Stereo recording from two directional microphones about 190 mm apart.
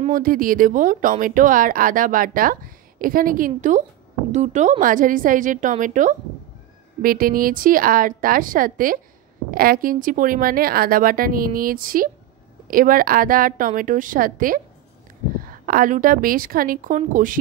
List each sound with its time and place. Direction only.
0.0 s a woman's voice: 45° right (ahead or behind)